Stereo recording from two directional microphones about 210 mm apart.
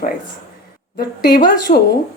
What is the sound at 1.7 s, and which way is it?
Speech, 35° left (ahead or behind).